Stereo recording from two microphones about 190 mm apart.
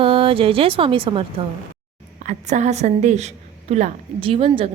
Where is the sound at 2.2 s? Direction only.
40° right (ahead or behind).